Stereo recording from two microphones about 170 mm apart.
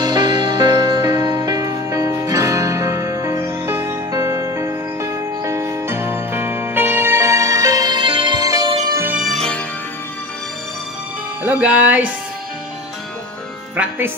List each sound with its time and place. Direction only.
0.0 s music: 25° right (ahead or behind)
9.1 s music: centre (ahead or behind)
11.4 s speech: 10° right (ahead or behind)
13.7 s speech: 10° right (ahead or behind)